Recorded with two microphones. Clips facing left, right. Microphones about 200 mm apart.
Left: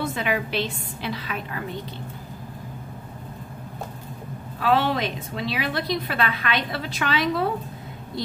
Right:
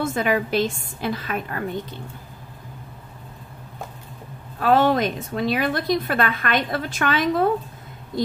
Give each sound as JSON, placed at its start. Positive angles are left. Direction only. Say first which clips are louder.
{"t": 0.0, "sound": "a woman's voice", "louder": "right 4 dB", "side_deg": -45}
{"t": 4.6, "sound": "a woman's voice", "louder": "right 4 dB", "side_deg": -45}